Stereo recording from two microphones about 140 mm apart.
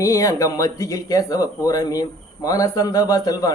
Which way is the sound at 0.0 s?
25° left (ahead or behind).